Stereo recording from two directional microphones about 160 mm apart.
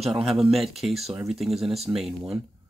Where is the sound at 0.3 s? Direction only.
Centre (ahead or behind).